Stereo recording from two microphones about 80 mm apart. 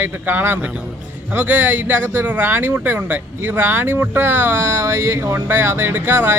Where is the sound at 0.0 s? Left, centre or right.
Right.